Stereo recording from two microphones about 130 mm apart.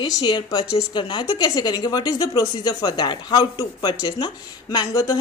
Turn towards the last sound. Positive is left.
turn(degrees=25)  # may be behind; listen again after turning